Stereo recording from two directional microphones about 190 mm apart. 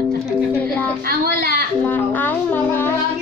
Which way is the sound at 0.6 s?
10° left (ahead or behind).